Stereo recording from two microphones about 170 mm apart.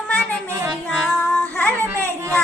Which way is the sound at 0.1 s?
10° left (ahead or behind).